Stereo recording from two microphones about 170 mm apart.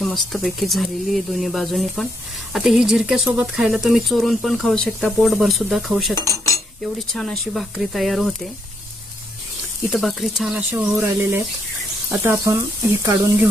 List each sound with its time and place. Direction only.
0.0 s speech: centre (ahead or behind)
9.9 s speech: centre (ahead or behind); by 13.5 s 15° right (ahead or behind)